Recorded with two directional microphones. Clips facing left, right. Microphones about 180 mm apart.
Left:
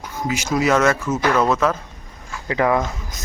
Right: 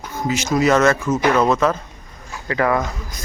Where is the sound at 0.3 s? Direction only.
10° left (ahead or behind).